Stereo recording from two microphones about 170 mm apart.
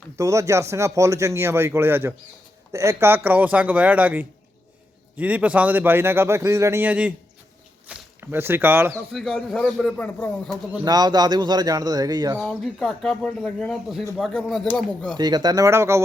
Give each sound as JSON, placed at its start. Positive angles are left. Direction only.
{"t": 0.2, "sound": "speech", "side_deg": -20}
{"t": 9.1, "sound": "speech", "side_deg": 0}
{"t": 10.8, "sound": "speech", "side_deg": -25}
{"t": 12.4, "sound": "speech", "side_deg": 0}
{"t": 15.1, "sound": "speech", "side_deg": -25}